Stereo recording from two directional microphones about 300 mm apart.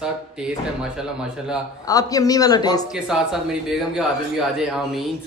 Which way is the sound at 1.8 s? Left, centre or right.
Centre.